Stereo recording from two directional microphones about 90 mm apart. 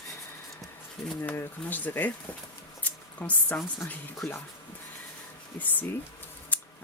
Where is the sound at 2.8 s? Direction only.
15° left (ahead or behind).